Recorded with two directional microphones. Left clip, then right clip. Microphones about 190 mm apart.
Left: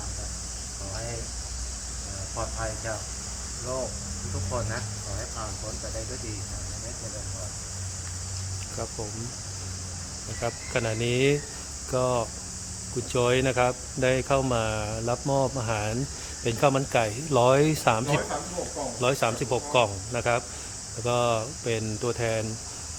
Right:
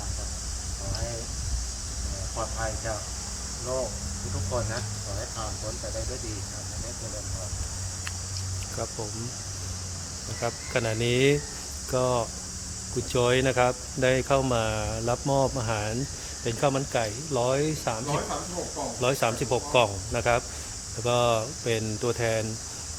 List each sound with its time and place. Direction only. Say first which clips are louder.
10.4 s speech: even; centre (ahead or behind)
16.4 s speech: left 3 dB; 15° left (ahead or behind)
17.3 s speech: left 5 dB; 30° left (ahead or behind)
18.9 s speech: even; 10° left (ahead or behind)